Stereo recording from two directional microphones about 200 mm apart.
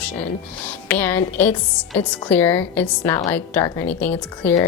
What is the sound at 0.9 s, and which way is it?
A woman's voice, 10° left (ahead or behind).